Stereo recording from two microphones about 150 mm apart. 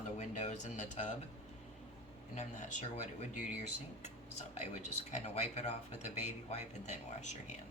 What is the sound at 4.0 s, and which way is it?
Speech, 50° left (ahead or behind).